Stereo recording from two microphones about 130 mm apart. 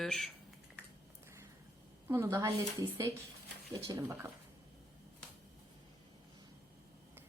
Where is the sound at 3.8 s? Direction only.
25° right (ahead or behind).